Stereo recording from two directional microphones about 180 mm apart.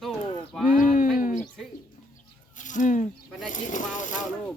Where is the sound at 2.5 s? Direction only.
45° left (ahead or behind).